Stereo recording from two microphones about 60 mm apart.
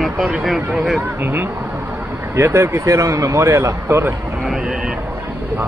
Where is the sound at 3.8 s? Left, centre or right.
Right.